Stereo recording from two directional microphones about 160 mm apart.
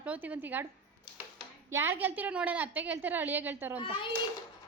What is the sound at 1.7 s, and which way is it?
A woman's voice, 15° right (ahead or behind).